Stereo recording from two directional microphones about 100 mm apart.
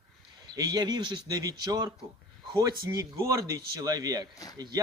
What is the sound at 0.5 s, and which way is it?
Speech, 45° right (ahead or behind).